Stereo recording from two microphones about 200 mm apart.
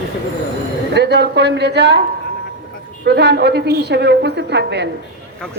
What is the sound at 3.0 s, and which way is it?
A woman's voice, 55° right (ahead or behind).